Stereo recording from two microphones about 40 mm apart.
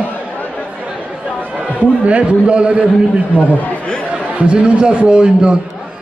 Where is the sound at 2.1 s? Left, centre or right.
Right.